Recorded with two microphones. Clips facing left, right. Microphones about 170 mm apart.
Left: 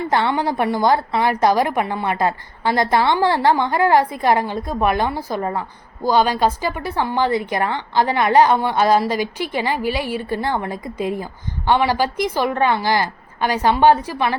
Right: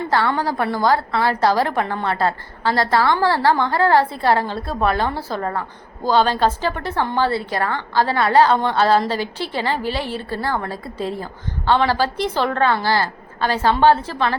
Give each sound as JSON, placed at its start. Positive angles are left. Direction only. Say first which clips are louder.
{"t": 0.1, "sound": "a woman's voice", "louder": "even", "side_deg": 20}